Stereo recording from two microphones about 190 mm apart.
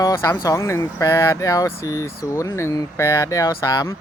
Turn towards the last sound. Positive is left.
turn(degrees=20)  # may be behind; listen again after turning